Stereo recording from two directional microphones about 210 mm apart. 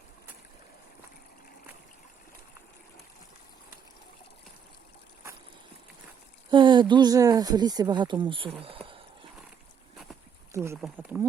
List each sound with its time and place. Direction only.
6.5 s speech: 20° right (ahead or behind)
10.5 s speech: 15° right (ahead or behind)